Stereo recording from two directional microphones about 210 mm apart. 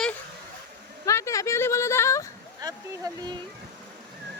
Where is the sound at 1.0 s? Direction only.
15° left (ahead or behind).